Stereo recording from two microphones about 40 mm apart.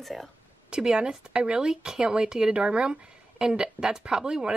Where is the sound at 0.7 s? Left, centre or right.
Right.